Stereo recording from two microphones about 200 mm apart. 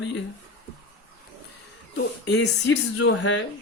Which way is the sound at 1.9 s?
60° left (ahead or behind).